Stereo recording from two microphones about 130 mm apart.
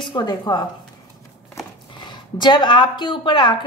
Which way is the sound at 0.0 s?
35° left (ahead or behind).